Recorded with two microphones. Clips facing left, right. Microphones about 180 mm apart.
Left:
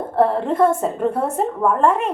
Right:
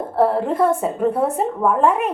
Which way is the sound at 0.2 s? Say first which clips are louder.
Left 1 dB; 5° right (ahead or behind).